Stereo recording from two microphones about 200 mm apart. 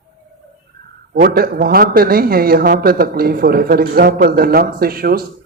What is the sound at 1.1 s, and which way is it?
A man's voice, 50° right (ahead or behind).